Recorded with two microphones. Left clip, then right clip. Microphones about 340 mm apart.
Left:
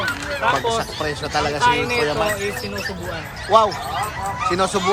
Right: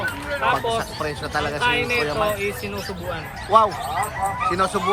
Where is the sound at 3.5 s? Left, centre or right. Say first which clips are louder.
Left 1 dB; centre.